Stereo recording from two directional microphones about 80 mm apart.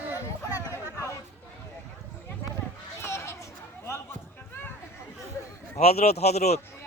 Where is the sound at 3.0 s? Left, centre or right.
Left.